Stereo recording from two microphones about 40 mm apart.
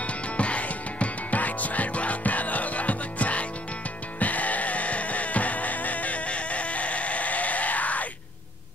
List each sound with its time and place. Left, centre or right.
0.0 s music: left